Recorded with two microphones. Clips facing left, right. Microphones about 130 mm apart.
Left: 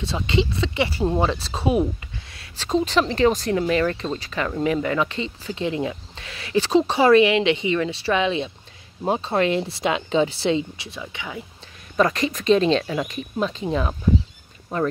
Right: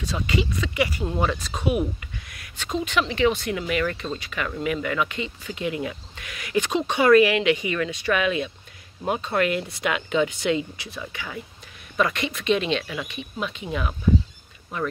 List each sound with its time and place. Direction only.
0.0 s speech: 25° left (ahead or behind)
12.0 s speech: 35° left (ahead or behind)